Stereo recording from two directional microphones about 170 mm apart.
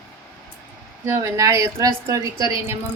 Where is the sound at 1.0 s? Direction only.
15° right (ahead or behind).